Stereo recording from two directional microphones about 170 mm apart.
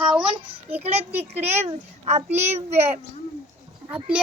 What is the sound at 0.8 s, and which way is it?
A child's voice, 35° right (ahead or behind).